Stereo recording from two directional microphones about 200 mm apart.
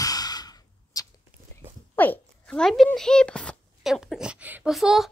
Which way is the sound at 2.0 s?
5° left (ahead or behind).